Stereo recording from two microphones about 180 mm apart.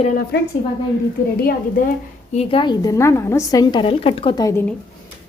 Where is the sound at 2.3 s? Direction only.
30° left (ahead or behind); by 4.7 s 15° left (ahead or behind).